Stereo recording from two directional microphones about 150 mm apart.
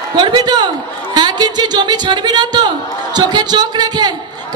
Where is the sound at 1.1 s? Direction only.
30° right (ahead or behind).